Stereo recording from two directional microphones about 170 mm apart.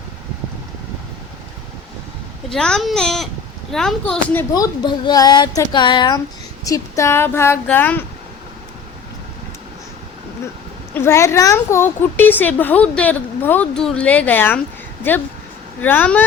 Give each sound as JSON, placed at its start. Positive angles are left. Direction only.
{"t": 2.5, "sound": "speech", "side_deg": 5}
{"t": 4.5, "sound": "a woman's voice", "side_deg": 25}
{"t": 10.9, "sound": "a woman's voice", "side_deg": 15}